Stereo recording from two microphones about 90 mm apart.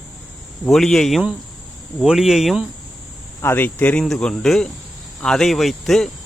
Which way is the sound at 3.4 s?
25° left (ahead or behind).